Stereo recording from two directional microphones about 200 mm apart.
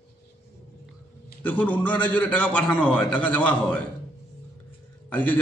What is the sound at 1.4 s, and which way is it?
A man's voice, 10° left (ahead or behind).